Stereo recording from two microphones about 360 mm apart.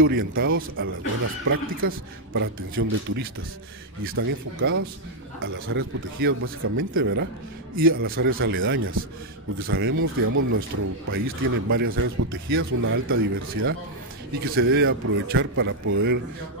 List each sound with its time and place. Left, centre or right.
0.0 s speech: right